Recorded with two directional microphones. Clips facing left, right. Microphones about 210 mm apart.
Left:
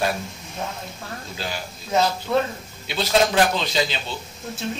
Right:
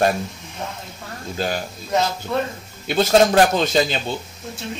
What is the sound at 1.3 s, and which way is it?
Speech, 50° right (ahead or behind).